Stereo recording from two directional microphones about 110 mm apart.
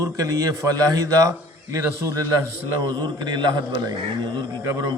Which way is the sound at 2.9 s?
40° right (ahead or behind).